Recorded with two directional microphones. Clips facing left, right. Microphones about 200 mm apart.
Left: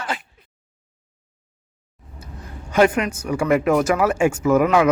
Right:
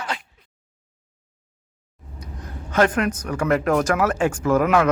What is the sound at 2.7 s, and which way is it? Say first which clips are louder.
Speech: left 2 dB; 10° left (ahead or behind).